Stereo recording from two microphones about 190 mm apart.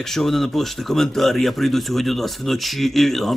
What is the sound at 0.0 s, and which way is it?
Speech, centre (ahead or behind).